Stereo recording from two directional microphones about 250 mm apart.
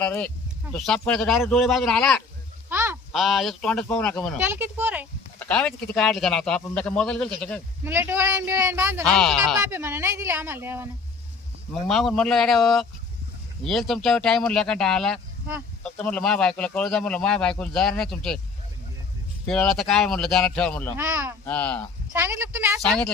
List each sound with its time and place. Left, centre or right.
0.0 s a man's voice: centre
2.6 s speech: centre
4.4 s speech: centre
5.4 s a man's voice: centre
7.9 s speech: centre
9.0 s a man's voice: centre
19.5 s a man's voice: centre
20.9 s speech: centre
21.4 s a man's voice: centre
22.1 s speech: centre